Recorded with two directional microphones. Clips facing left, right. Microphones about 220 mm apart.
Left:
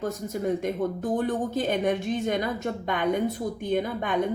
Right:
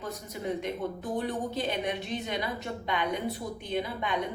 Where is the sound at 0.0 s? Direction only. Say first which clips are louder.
Left 7 dB; 45° left (ahead or behind).